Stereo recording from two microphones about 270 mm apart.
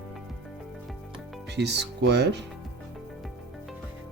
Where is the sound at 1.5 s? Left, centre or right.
Right.